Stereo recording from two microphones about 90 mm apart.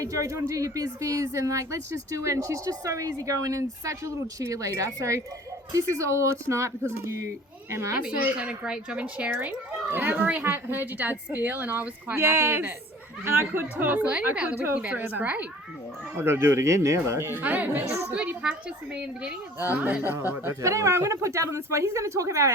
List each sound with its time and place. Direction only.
0.0 s speech: 35° right (ahead or behind)
7.9 s speech: 15° right (ahead or behind)
16.2 s speech: 30° right (ahead or behind)
17.4 s speech: 20° right (ahead or behind)
19.5 s speech: 25° right (ahead or behind)
20.5 s speech: 35° right (ahead or behind)